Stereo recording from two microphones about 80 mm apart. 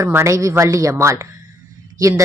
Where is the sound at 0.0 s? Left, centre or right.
Right.